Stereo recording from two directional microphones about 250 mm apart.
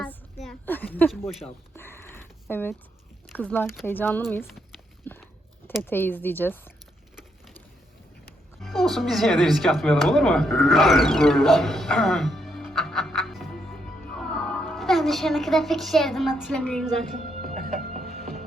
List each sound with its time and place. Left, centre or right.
0.0 s a sound: centre
3.2 s speech: centre
5.1 s a sound: centre
5.6 s speech: centre
8.6 s speech: centre
17.2 s music: right